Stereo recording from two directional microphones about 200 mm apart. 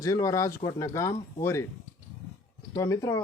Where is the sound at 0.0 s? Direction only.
15° left (ahead or behind).